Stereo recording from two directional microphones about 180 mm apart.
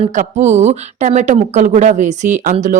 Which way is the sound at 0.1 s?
40° right (ahead or behind).